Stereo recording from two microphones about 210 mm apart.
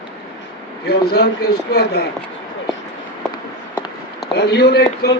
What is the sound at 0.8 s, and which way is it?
Speech, 50° left (ahead or behind).